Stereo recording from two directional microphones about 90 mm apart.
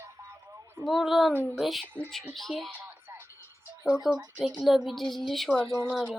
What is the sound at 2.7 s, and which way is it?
Music, 20° right (ahead or behind).